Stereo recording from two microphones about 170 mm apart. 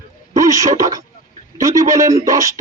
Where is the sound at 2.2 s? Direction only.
20° right (ahead or behind).